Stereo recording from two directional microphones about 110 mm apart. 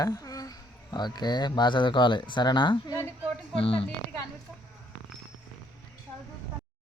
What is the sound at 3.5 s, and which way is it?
Speech, 55° left (ahead or behind).